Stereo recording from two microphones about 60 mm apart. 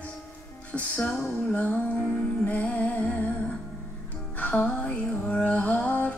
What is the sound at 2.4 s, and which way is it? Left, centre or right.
Music, left.